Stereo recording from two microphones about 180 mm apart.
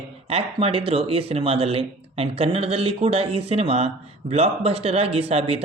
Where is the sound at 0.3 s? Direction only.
30° right (ahead or behind).